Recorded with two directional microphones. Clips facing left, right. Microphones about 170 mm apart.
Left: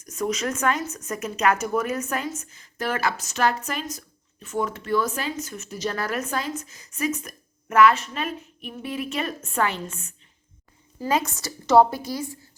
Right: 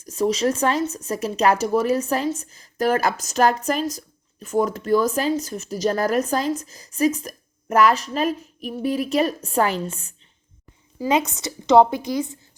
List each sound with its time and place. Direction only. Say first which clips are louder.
0.0 s speech: right 6 dB; 30° right (ahead or behind)
11.3 s a woman's voice: right 3 dB; 20° right (ahead or behind)